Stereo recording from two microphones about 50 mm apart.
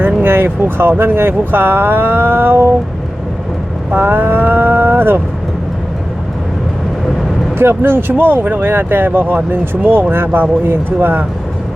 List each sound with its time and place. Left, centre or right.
0.2 s speech: right
3.9 s speech: right
7.6 s speech: right